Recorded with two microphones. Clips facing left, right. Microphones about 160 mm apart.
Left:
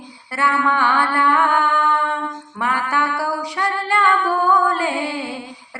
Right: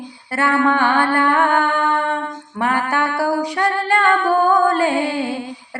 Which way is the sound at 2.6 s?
50° right (ahead or behind).